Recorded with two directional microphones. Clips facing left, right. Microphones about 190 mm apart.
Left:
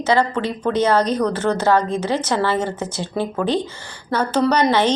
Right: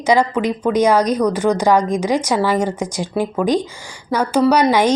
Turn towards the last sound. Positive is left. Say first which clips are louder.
# right 3 dB
turn(degrees=-10)  # may be behind; listen again after turning